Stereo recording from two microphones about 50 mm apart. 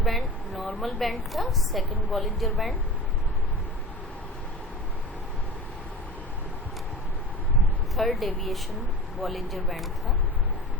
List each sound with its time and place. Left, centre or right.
0.0 s a sound: centre
0.7 s a woman's voice: left
1.0 s a woman's voice: centre
7.9 s a woman's voice: centre